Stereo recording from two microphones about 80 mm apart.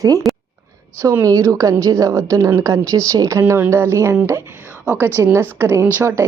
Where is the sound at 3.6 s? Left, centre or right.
Right.